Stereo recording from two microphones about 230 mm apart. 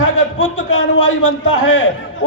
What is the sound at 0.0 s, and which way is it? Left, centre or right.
A man's voice, left.